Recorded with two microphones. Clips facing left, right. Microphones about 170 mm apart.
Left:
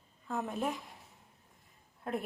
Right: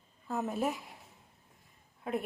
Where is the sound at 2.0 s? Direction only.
5° right (ahead or behind).